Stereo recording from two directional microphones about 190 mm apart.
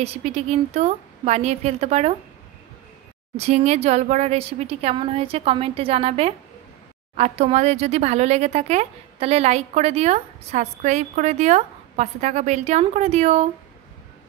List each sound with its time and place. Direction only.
0.0 s speech: 35° right (ahead or behind)
3.3 s speech: 35° right (ahead or behind)